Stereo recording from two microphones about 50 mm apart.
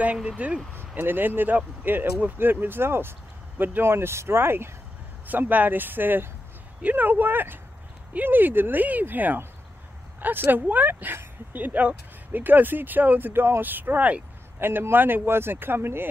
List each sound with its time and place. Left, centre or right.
0.4 s speech: right
0.7 s speech: right
3.9 s speech: right
5.2 s speech: right
13.3 s speech: right
13.6 s speech: right
14.6 s speech: right